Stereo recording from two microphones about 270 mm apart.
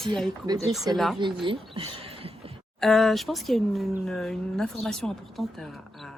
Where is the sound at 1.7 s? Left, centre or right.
Right.